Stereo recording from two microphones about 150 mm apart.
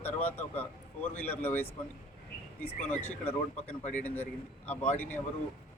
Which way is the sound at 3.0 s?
15° left (ahead or behind).